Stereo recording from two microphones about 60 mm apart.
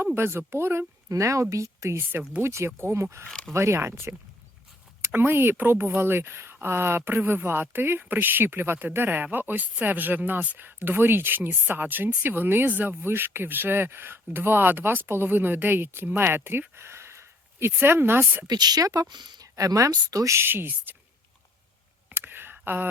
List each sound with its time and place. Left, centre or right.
0.1 s speech: right
1.1 s speech: right
3.2 s speech: centre
3.5 s speech: right
16.0 s a sound: right
17.8 s speech: right
18.7 s speech: right
20.3 s speech: right
22.1 s a sound: right
22.6 s speech: right